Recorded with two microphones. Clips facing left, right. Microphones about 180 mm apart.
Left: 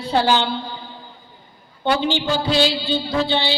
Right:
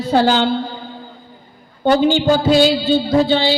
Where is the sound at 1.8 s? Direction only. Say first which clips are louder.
Right 7 dB; 45° right (ahead or behind).